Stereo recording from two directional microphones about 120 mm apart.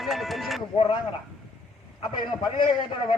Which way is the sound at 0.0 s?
Centre (ahead or behind).